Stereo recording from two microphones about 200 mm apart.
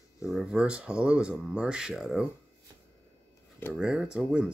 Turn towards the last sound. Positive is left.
turn(degrees=-5)  # may be behind; listen again after turning